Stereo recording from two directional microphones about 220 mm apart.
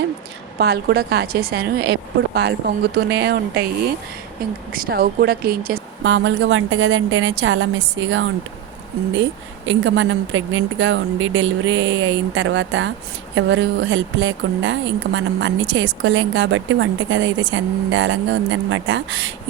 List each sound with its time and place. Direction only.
0.6 s speech: 45° right (ahead or behind)
4.7 s speech: 45° right (ahead or behind)
9.6 s speech: 60° right (ahead or behind)